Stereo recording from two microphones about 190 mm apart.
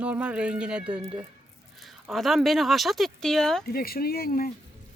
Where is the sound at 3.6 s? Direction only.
50° left (ahead or behind).